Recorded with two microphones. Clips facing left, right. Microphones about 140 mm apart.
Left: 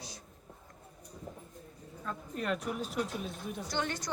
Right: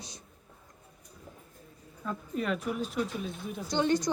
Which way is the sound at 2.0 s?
Centre (ahead or behind).